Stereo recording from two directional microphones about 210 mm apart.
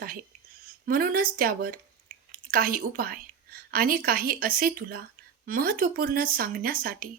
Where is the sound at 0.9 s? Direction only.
45° right (ahead or behind).